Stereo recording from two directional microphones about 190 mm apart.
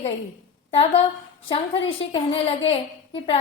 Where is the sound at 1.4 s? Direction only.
30° left (ahead or behind).